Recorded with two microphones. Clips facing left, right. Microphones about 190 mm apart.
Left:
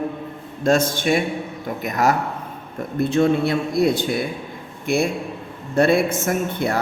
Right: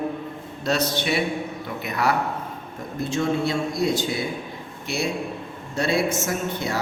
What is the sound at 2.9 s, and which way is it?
A man's voice, 60° left (ahead or behind).